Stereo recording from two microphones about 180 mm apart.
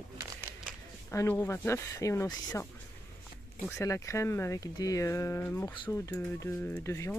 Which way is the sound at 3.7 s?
15° left (ahead or behind).